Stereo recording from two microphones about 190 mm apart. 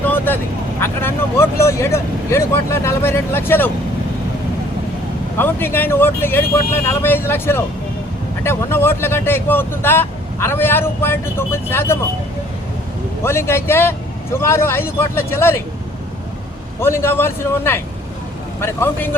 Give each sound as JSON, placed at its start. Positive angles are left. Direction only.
{"t": 0.0, "sound": "vehicle", "side_deg": 10}
{"t": 0.8, "sound": "speech", "side_deg": 15}
{"t": 5.4, "sound": "speech", "side_deg": 10}
{"t": 13.2, "sound": "speech", "side_deg": 15}
{"t": 16.8, "sound": "speech", "side_deg": 15}